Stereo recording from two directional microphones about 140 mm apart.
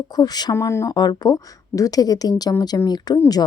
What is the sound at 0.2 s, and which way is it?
Speech, 30° left (ahead or behind).